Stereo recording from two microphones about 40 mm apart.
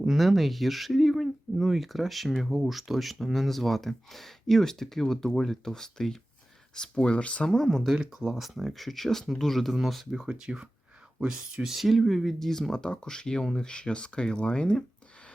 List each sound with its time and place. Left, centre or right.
0.2 s speech: centre; by 7.4 s left
7.6 s speech: centre
7.9 s speech: centre
8.3 s speech: centre
10.1 s speech: right
11.8 s speech: centre
13.6 s speech: left